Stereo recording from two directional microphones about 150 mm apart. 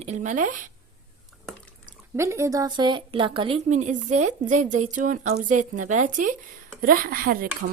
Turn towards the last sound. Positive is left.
turn(degrees=-75)  # may be behind; listen again after turning